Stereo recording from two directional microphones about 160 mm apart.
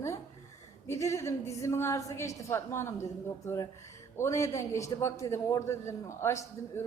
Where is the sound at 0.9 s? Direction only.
20° left (ahead or behind).